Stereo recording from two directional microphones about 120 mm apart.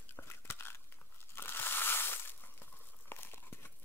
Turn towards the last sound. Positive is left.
turn(degrees=20)  # may be behind; listen again after turning